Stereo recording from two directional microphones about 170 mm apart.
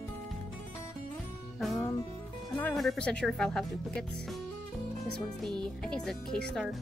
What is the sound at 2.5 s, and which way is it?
Speech, 5° left (ahead or behind).